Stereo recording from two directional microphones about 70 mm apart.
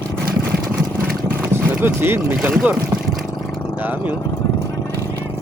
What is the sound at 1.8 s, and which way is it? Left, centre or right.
Speech, right.